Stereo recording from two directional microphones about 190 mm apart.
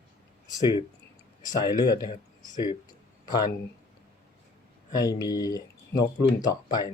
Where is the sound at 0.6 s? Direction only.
25° left (ahead or behind).